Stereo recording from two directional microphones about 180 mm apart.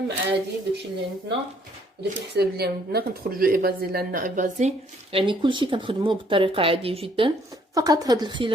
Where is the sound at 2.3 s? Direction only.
65° right (ahead or behind); by 4.7 s 45° right (ahead or behind).